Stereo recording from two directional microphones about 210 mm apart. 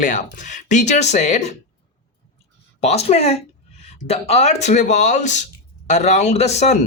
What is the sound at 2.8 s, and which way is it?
Speech, 30° left (ahead or behind).